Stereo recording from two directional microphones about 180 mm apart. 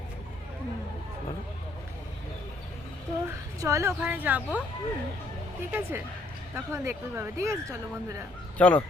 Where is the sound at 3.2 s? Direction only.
15° right (ahead or behind).